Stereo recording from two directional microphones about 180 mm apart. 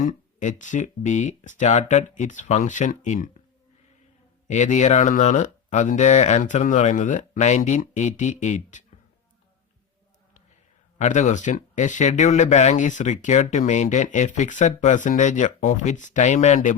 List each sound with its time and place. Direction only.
0.0 s speech: 45° left (ahead or behind)
4.4 s speech: 40° left (ahead or behind)
10.9 s speech: 40° left (ahead or behind)